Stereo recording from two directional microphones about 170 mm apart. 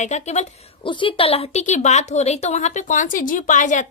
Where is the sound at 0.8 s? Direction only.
30° left (ahead or behind); by 3.8 s 45° left (ahead or behind).